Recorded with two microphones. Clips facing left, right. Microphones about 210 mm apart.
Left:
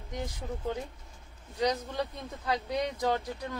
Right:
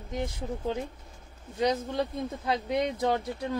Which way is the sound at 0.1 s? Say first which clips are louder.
Right 4 dB; 25° right (ahead or behind).